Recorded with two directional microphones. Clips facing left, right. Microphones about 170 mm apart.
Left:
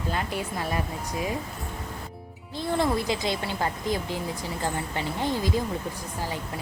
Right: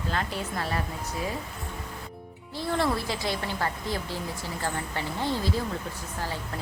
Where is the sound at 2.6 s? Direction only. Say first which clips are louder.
Left 2 dB; 15° left (ahead or behind).